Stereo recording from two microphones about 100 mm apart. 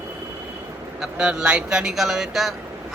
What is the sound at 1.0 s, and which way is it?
Speech, 10° right (ahead or behind).